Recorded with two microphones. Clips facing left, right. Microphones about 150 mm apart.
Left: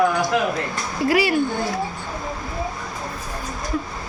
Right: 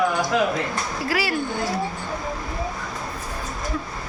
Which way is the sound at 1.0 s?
20° left (ahead or behind).